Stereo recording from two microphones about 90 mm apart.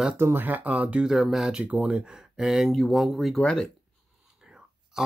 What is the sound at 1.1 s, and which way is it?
Speech, 5° right (ahead or behind).